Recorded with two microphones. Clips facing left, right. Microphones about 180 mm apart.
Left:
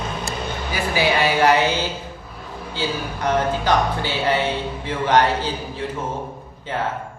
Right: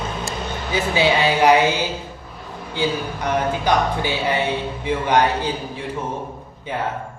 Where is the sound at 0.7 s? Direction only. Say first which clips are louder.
Right 2 dB; 20° right (ahead or behind).